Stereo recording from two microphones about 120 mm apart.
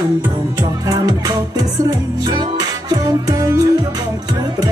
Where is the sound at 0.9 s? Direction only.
35° right (ahead or behind).